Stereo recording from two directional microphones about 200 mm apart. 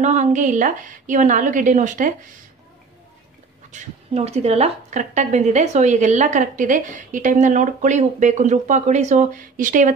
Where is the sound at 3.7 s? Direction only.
30° right (ahead or behind).